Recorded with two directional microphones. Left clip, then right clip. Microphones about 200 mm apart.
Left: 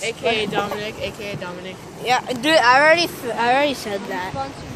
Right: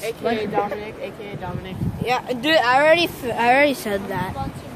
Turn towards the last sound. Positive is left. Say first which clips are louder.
# right 2 dB
turn(degrees=-25)  # may be behind; listen again after turning